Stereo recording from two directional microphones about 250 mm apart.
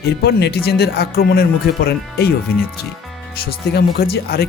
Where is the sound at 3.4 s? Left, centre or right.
Left.